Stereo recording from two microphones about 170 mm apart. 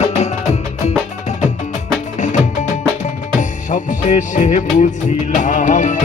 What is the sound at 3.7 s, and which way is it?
Music, 45° left (ahead or behind).